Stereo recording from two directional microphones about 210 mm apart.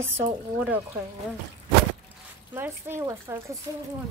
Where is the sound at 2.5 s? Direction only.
10° right (ahead or behind).